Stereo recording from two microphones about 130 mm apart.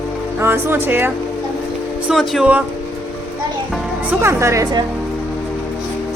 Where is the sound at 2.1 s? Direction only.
5° right (ahead or behind).